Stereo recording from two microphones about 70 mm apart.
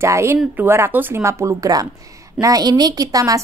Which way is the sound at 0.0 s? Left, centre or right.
Right.